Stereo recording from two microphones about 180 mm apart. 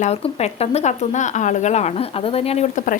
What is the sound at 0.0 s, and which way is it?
Speech, 35° left (ahead or behind).